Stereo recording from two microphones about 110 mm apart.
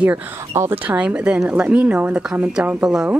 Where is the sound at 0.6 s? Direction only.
20° right (ahead or behind).